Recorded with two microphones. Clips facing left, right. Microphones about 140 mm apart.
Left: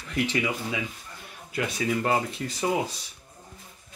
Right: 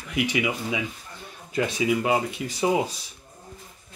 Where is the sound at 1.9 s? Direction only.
5° right (ahead or behind).